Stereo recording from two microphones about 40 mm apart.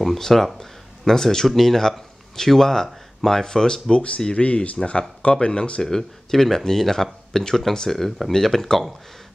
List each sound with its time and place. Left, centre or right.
0.2 s speech: centre
4.3 s speech: left; by 8.9 s centre